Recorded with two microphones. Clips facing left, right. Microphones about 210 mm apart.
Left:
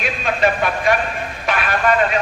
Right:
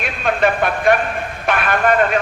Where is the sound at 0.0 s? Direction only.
55° right (ahead or behind).